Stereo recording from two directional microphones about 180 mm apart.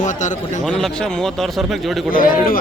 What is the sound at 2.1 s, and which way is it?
Speech, 50° left (ahead or behind).